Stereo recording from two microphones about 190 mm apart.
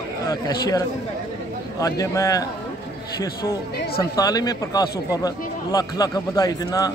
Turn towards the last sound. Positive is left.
turn(degrees=20)  # may be behind; listen again after turning